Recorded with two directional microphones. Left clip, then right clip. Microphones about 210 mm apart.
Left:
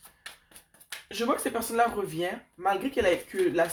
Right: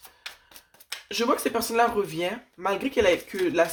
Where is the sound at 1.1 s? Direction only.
40° right (ahead or behind).